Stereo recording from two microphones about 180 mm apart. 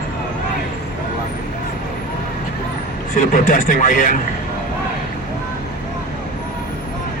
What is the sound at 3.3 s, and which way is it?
Speech, 50° left (ahead or behind).